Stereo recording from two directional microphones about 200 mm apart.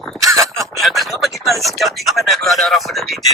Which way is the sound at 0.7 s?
Centre (ahead or behind).